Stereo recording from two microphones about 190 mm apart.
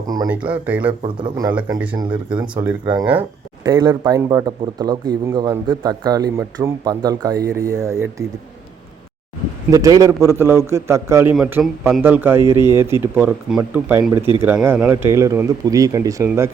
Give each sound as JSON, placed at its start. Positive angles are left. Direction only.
{"t": 0.3, "sound": "speech", "side_deg": -5}
{"t": 1.0, "sound": "speech", "side_deg": -20}
{"t": 1.5, "sound": "speech", "side_deg": -10}
{"t": 2.0, "sound": "speech", "side_deg": -25}
{"t": 3.1, "sound": "a sound", "side_deg": -10}
{"t": 3.7, "sound": "speech", "side_deg": -20}
{"t": 9.6, "sound": "speech", "side_deg": -20}